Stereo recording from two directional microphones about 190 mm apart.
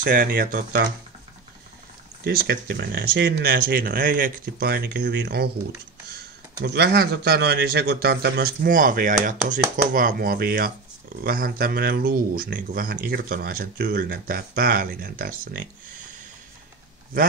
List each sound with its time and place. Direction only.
0.0 s speech: 45° right (ahead or behind)
2.2 s a man's voice: 60° right (ahead or behind)
6.6 s a man's voice: 60° right (ahead or behind)